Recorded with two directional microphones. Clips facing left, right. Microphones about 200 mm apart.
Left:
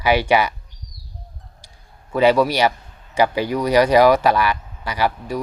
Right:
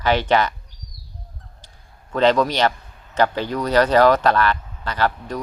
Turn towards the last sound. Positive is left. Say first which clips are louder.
# left 1 dB
turn(degrees=10)  # may be behind; listen again after turning